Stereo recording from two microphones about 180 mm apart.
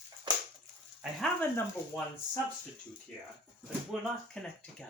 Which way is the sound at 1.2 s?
10° left (ahead or behind).